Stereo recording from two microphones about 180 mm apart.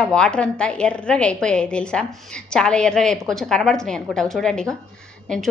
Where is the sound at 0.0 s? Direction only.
5° left (ahead or behind).